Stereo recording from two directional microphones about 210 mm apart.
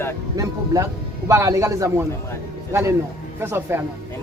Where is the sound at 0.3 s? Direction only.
15° right (ahead or behind).